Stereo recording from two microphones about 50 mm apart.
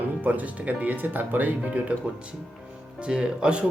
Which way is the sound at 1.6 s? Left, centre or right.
Right.